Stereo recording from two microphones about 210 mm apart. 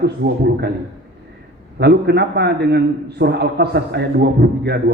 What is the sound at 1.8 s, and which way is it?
A man's voice, 50° right (ahead or behind).